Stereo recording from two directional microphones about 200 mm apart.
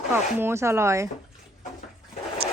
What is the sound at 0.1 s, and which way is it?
Speech, 10° right (ahead or behind).